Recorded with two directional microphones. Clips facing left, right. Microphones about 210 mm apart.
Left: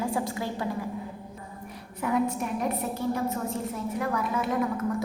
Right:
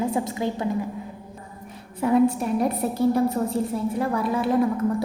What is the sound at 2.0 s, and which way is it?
A woman's voice, 30° right (ahead or behind).